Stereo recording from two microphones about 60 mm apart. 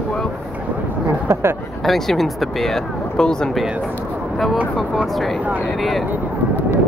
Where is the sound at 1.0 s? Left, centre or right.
Right.